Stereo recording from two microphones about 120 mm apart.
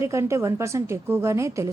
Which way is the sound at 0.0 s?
25° right (ahead or behind).